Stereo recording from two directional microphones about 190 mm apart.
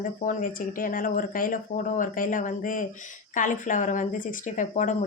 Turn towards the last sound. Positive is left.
turn(degrees=40)  # may be behind; listen again after turning